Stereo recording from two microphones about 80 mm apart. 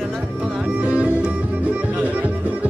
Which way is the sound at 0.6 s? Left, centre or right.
Centre.